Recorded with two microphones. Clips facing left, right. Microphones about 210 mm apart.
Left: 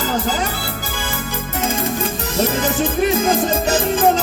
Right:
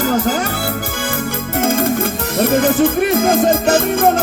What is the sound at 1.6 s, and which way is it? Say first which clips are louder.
Music: right 5 dB; 55° right (ahead or behind).